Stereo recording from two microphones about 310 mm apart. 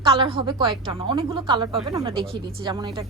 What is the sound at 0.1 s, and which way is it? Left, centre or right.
A woman's voice, centre.